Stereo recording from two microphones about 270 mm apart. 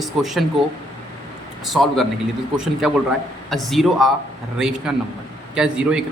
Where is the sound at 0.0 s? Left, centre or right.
Centre.